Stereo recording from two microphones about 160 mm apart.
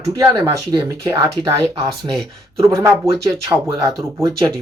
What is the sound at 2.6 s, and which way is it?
Speech, 20° right (ahead or behind).